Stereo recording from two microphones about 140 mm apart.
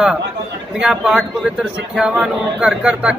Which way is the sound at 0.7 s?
5° right (ahead or behind).